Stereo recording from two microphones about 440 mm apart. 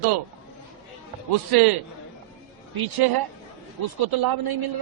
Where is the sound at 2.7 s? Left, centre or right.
Right.